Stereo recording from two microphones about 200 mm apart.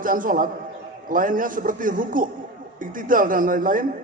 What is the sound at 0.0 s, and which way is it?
A man's voice, 45° right (ahead or behind).